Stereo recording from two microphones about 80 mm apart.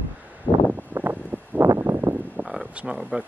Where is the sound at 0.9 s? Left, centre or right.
Right.